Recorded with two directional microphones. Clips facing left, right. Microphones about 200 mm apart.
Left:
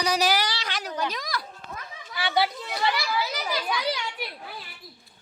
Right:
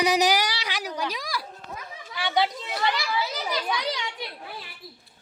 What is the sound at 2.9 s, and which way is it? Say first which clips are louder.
Children playing: even; 5° left (ahead or behind).